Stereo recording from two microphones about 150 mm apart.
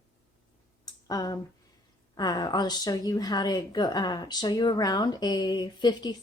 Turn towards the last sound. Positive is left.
turn(degrees=30)  # may be behind; listen again after turning